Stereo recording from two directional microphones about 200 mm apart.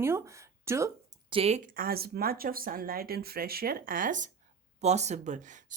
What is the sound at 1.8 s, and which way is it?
Speech, 50° right (ahead or behind).